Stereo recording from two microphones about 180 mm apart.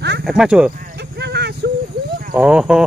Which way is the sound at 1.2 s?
65° right (ahead or behind).